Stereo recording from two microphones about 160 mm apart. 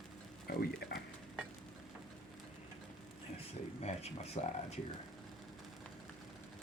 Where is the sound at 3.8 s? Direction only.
40° left (ahead or behind).